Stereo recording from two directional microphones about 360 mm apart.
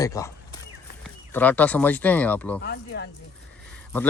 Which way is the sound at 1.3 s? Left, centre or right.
Centre.